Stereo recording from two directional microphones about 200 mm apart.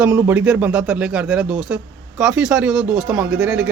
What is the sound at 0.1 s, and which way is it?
Speech, 15° right (ahead or behind).